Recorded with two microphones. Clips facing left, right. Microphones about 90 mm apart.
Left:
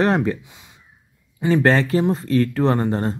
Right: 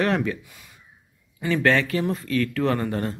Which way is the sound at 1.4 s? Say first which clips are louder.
Left 4 dB; 30° left (ahead or behind).